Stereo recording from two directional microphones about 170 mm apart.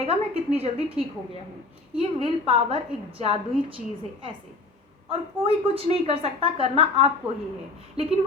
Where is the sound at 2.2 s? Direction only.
30° right (ahead or behind).